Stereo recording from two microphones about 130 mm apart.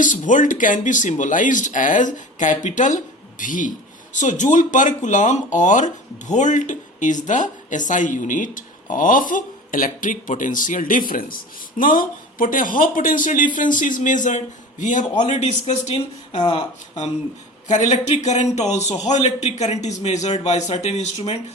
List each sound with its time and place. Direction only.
0.0 s a man's voice: 80° left
15.3 s a man's voice: 55° left (ahead or behind)
16.3 s speech: 40° left (ahead or behind)
17.7 s a woman's voice: 70° left (ahead or behind)